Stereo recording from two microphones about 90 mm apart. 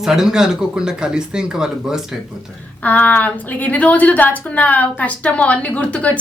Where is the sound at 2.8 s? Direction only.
15° left (ahead or behind).